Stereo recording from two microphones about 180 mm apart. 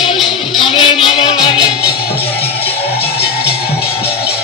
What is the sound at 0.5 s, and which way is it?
Music, 25° left (ahead or behind).